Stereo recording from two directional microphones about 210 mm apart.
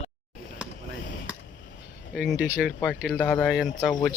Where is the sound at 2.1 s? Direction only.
5° right (ahead or behind).